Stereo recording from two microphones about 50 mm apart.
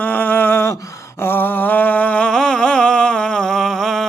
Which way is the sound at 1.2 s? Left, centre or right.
Left.